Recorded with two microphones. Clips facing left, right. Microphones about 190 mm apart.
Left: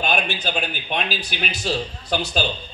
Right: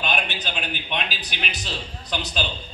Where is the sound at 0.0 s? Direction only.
45° left (ahead or behind).